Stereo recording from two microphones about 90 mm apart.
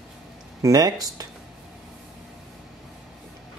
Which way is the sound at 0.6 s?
40° right (ahead or behind).